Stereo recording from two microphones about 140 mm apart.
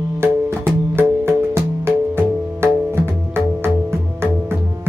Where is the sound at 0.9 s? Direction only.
15° right (ahead or behind).